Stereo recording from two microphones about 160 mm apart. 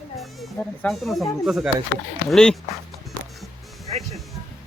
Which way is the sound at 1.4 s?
5° right (ahead or behind).